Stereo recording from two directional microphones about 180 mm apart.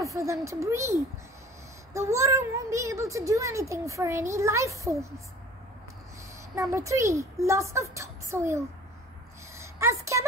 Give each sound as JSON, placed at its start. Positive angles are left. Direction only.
{"t": 0.0, "sound": "a child's voice", "side_deg": -15}
{"t": 2.0, "sound": "a child's voice", "side_deg": -15}
{"t": 6.5, "sound": "a child's voice", "side_deg": -15}
{"t": 9.6, "sound": "a sound", "side_deg": -15}